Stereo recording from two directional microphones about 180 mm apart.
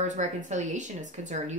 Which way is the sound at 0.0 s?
40° right (ahead or behind).